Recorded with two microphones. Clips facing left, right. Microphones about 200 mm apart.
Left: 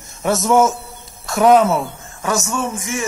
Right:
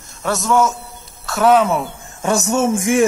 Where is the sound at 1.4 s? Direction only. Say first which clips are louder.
Left 1 dB; 10° left (ahead or behind).